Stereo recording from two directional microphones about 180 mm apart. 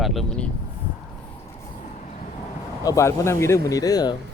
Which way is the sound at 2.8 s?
15° left (ahead or behind).